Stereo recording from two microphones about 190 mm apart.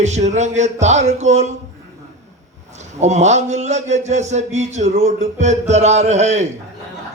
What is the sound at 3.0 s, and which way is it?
A man's voice, 35° right (ahead or behind).